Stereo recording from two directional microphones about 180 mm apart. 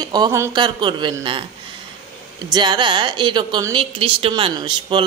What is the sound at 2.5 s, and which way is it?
Speech, 25° right (ahead or behind).